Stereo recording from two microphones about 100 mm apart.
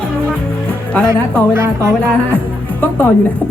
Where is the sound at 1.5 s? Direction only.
25° right (ahead or behind).